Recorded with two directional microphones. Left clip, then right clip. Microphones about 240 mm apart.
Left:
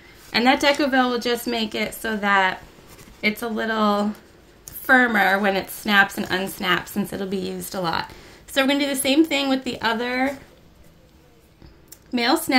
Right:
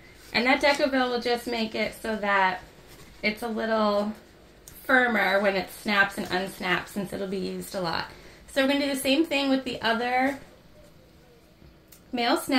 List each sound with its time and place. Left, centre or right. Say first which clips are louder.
0.3 s a woman's voice: left 4 dB; left
12.1 s a woman's voice: left 4 dB; left